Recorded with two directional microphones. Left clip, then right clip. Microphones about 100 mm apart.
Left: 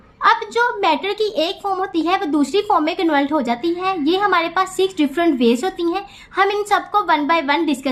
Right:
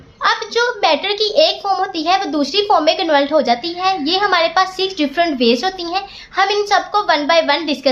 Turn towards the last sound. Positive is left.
turn(degrees=40)  # may be behind; listen again after turning